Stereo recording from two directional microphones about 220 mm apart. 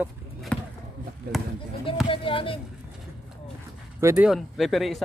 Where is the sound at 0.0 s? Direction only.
Centre (ahead or behind).